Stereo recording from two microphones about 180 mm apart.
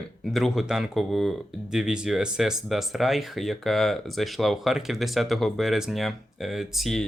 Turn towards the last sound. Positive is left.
turn(degrees=0)  # may be behind; listen again after turning